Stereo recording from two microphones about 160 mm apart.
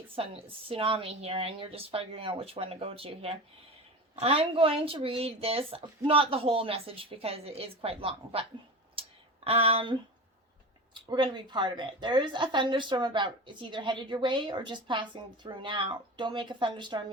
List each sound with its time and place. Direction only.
0.2 s a woman's voice: 35° right (ahead or behind)
9.0 s a sound: 35° right (ahead or behind)
11.1 s a woman's voice: 30° right (ahead or behind)